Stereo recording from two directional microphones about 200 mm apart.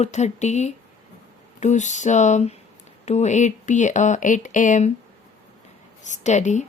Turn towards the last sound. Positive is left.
turn(degrees=35)  # may be behind; listen again after turning